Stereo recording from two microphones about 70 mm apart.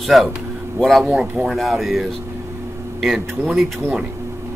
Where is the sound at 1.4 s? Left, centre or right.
Centre.